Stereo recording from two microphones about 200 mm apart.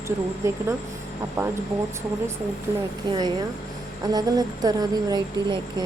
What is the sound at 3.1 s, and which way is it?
Speech, 20° right (ahead or behind).